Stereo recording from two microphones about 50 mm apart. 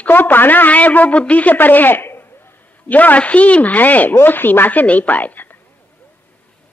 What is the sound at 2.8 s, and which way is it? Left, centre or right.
A woman's voice, left.